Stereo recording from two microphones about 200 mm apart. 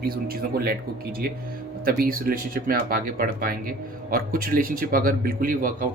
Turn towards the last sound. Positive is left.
turn(degrees=-45)  # may be behind; listen again after turning